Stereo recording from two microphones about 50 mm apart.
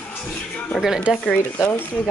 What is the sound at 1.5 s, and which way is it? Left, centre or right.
Speech, left.